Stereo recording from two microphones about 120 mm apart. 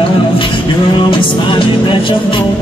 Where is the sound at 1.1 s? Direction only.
45° left (ahead or behind).